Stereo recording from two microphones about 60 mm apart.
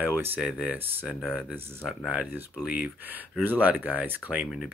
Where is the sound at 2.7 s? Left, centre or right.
Right.